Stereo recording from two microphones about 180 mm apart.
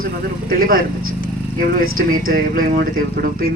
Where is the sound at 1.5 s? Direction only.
55° right (ahead or behind).